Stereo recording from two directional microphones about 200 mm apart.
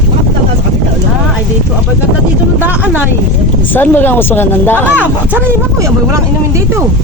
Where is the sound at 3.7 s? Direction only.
10° left (ahead or behind).